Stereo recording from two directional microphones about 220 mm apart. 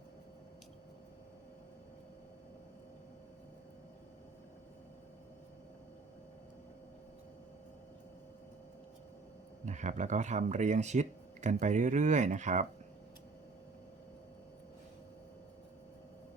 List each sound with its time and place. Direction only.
9.6 s speech: 35° right (ahead or behind)